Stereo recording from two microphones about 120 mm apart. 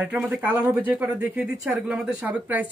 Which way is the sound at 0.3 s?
15° right (ahead or behind).